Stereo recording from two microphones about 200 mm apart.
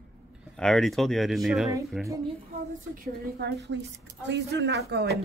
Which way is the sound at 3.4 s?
60° right (ahead or behind).